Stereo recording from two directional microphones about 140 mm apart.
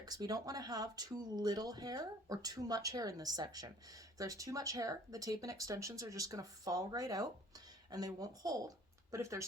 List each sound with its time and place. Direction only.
0.0 s speech: 30° right (ahead or behind)